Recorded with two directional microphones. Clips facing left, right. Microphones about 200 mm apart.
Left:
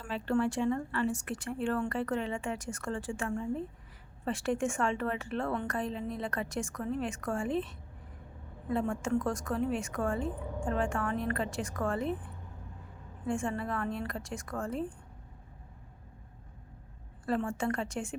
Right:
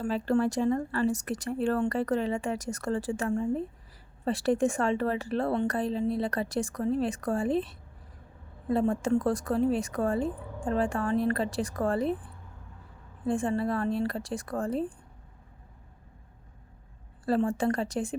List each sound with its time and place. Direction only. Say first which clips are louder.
0.0 s speech: right 4 dB; 35° right (ahead or behind)
13.2 s speech: right 6 dB; 35° right (ahead or behind)
17.2 s speech: right 5 dB; 35° right (ahead or behind)